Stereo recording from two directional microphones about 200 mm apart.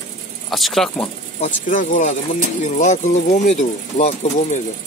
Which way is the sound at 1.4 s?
40° left (ahead or behind).